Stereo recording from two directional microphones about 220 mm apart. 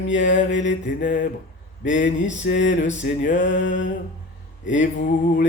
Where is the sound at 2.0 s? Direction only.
55° left (ahead or behind).